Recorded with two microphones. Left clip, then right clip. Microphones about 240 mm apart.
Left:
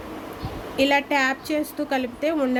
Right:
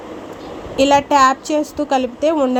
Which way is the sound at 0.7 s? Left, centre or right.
Centre.